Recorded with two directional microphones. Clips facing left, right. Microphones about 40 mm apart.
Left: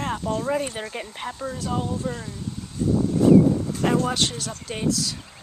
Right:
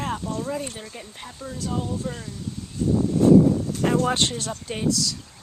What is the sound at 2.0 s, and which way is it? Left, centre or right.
Speech, centre.